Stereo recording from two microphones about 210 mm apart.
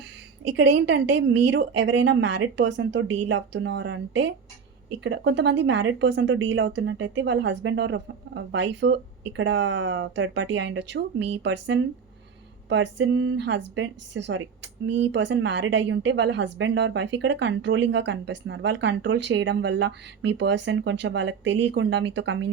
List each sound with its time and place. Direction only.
0.5 s a woman's voice: 55° right (ahead or behind)